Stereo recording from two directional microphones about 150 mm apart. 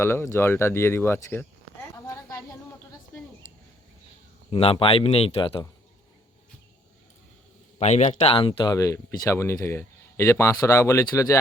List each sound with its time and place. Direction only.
0.0 s speech: 15° left (ahead or behind)
2.0 s a sound: 20° left (ahead or behind)
4.5 s speech: 40° left (ahead or behind)
7.8 s a man's voice: 50° left (ahead or behind)
8.4 s speech: 30° left (ahead or behind)